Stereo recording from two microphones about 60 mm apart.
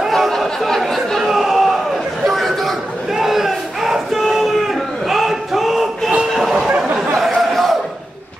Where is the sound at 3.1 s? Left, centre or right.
Centre.